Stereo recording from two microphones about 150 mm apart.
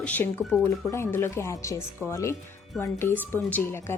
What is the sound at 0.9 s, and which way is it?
A woman's voice, 15° left (ahead or behind).